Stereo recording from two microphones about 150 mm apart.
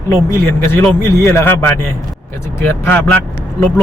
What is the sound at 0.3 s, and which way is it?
Speech, 15° left (ahead or behind).